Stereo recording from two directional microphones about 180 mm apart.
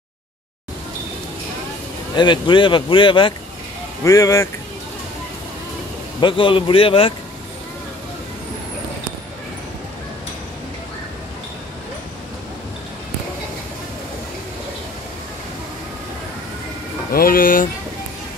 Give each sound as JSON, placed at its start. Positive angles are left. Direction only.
{"t": 2.1, "sound": "speech", "side_deg": 25}
{"t": 4.0, "sound": "speech", "side_deg": 15}
{"t": 6.2, "sound": "speech", "side_deg": 30}
{"t": 17.1, "sound": "speech", "side_deg": 55}